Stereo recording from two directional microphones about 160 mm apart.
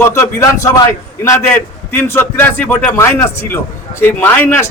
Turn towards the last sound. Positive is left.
turn(degrees=15)  # may be behind; listen again after turning